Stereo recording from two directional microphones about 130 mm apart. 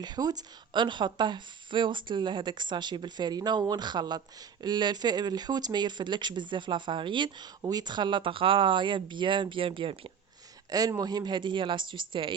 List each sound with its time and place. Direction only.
0.0 s a woman's voice: 30° right (ahead or behind)
10.7 s a woman's voice: 30° right (ahead or behind)